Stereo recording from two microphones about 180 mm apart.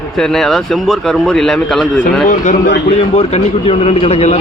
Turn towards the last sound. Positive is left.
turn(degrees=35)  # may be behind; listen again after turning